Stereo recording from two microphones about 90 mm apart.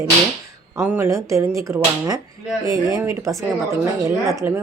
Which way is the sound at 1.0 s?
35° right (ahead or behind).